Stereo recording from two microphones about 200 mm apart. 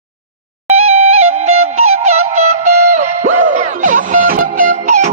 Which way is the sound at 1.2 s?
90° right.